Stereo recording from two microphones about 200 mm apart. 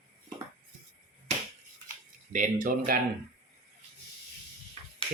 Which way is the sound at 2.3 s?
40° right (ahead or behind).